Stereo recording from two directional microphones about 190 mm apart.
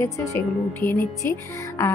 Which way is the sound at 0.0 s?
15° left (ahead or behind).